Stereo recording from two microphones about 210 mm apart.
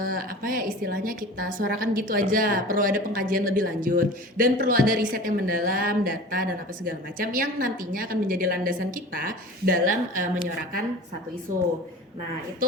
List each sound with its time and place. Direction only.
0.0 s a woman's voice: 40° right (ahead or behind)